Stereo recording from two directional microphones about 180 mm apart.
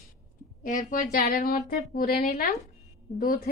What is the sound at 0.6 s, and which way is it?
Speech, 45° left (ahead or behind).